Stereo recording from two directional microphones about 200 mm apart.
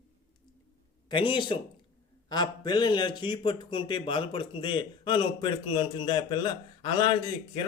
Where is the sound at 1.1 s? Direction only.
25° left (ahead or behind).